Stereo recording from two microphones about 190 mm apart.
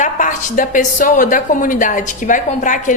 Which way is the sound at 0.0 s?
40° left (ahead or behind).